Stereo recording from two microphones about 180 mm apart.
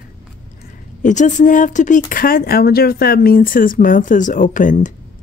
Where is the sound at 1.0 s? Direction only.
45° left (ahead or behind).